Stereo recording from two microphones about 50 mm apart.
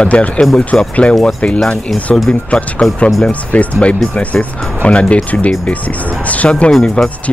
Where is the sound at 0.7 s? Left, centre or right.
Centre.